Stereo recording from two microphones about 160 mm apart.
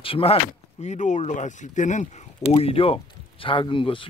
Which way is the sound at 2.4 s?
35° left (ahead or behind).